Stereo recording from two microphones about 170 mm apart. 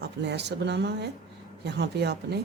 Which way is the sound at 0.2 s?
80° right.